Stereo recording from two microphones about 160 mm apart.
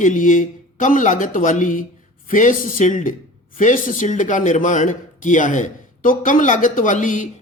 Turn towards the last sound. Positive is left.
turn(degrees=50)  # may be behind; listen again after turning